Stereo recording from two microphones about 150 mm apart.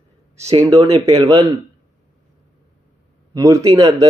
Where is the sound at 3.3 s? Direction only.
20° right (ahead or behind).